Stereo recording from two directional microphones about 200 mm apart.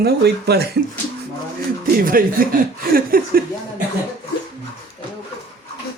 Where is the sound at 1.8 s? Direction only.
45° right (ahead or behind).